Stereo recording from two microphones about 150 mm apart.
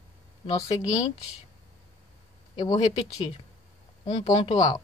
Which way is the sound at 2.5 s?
25° left (ahead or behind).